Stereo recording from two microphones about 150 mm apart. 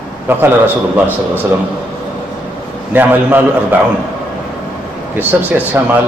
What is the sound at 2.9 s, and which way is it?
Speech, 15° right (ahead or behind).